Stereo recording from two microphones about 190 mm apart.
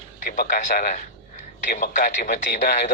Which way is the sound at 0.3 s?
50° left (ahead or behind).